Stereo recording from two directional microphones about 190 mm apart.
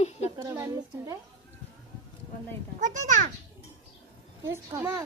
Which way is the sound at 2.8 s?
40° right (ahead or behind).